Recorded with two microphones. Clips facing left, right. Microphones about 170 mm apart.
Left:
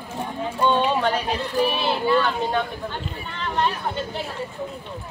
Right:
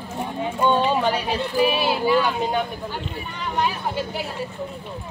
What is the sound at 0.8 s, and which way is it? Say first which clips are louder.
Speech: right 1 dB; 5° right (ahead or behind).